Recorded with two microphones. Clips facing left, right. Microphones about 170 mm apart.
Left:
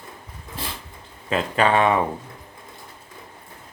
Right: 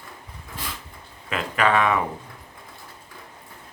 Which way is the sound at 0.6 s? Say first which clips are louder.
Left 3 dB; 30° left (ahead or behind).